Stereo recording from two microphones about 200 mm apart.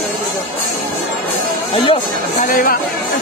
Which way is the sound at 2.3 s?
45° left (ahead or behind).